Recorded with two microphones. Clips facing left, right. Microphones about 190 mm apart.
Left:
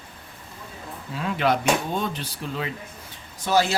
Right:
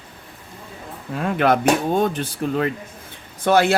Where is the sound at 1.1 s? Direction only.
55° right (ahead or behind).